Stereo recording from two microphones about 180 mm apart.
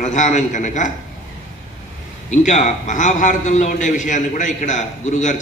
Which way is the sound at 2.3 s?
40° left (ahead or behind).